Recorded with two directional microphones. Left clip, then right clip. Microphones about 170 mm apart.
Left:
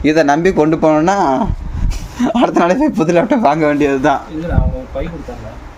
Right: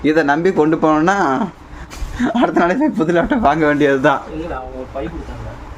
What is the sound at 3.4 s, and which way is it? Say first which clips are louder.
Speech: left 1 dB; 5° left (ahead or behind).